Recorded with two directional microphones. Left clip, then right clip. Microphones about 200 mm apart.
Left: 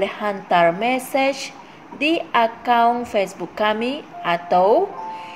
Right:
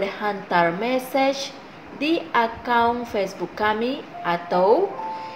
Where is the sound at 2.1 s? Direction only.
40° left (ahead or behind).